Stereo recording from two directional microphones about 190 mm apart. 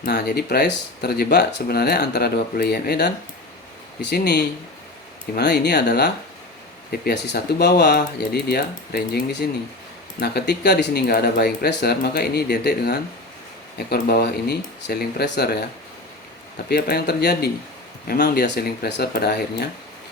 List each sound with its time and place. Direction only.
0.0 s speech: 55° left (ahead or behind)
16.6 s speech: 55° left (ahead or behind)